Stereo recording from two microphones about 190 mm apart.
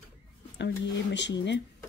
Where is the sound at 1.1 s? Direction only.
70° left (ahead or behind).